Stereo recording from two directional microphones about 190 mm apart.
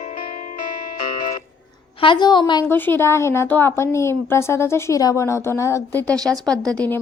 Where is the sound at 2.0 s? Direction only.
25° left (ahead or behind).